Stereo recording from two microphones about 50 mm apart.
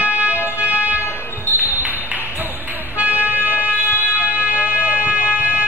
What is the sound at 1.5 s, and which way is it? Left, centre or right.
Music, right.